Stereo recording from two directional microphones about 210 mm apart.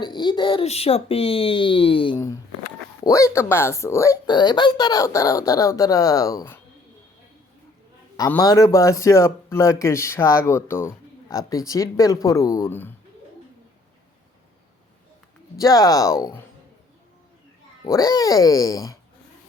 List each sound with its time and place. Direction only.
0.0 s speech: 20° left (ahead or behind)
8.1 s speech: 15° left (ahead or behind)
15.5 s speech: 15° left (ahead or behind)
17.8 s speech: 15° left (ahead or behind)